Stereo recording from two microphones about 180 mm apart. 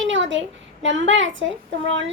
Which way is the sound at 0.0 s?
90° right.